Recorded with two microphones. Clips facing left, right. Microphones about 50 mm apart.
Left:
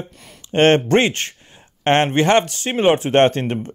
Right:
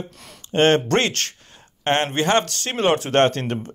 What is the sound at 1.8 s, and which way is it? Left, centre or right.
Speech, left.